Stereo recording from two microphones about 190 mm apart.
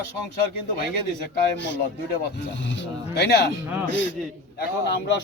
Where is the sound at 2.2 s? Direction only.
70° left (ahead or behind).